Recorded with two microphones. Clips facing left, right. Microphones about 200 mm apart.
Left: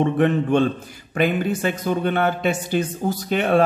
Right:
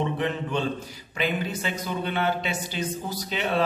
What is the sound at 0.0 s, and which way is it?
Speech, 55° left (ahead or behind).